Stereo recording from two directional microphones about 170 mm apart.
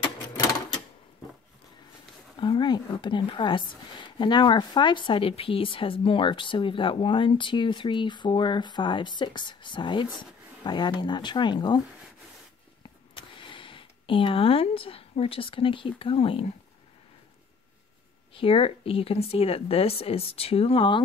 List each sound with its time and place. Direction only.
2.3 s a woman's voice: 30° left (ahead or behind)
13.1 s speech: 30° left (ahead or behind)
18.3 s speech: 35° left (ahead or behind)